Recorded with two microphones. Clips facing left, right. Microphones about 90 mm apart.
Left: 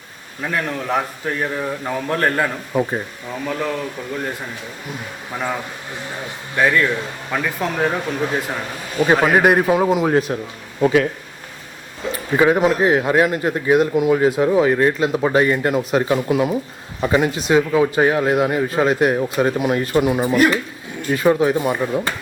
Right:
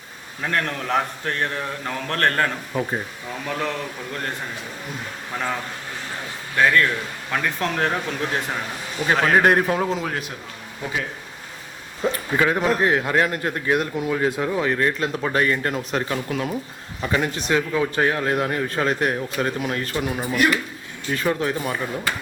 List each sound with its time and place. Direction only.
0.4 s a man's voice: 5° left (ahead or behind)
5.3 s a man's voice: 5° left (ahead or behind)
6.6 s a man's voice: 10° left (ahead or behind)
9.1 s a man's voice: 10° left (ahead or behind)
9.8 s a man's voice: 15° left (ahead or behind)
10.1 s speech: 35° left (ahead or behind)
10.8 s speech: 80° left
12.0 s speech: 40° right (ahead or behind)
12.4 s a man's voice: 15° left (ahead or behind)